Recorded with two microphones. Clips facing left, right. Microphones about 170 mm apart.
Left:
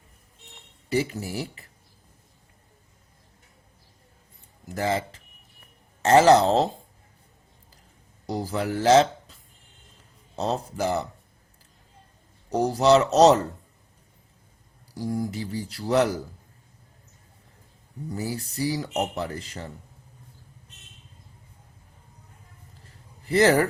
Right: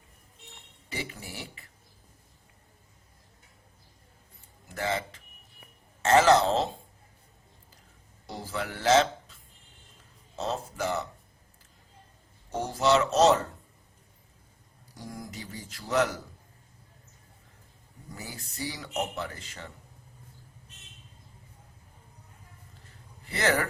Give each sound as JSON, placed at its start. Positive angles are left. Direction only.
{"t": 0.9, "sound": "speech", "side_deg": 40}
{"t": 4.7, "sound": "speech", "side_deg": 35}
{"t": 8.3, "sound": "speech", "side_deg": 40}
{"t": 10.3, "sound": "speech", "side_deg": 40}
{"t": 12.5, "sound": "speech", "side_deg": 35}
{"t": 14.9, "sound": "speech", "side_deg": 35}
{"t": 18.1, "sound": "speech", "side_deg": 35}
{"t": 18.6, "sound": "speech", "side_deg": 0}
{"t": 18.9, "sound": "speech", "side_deg": 40}
{"t": 23.2, "sound": "speech", "side_deg": 35}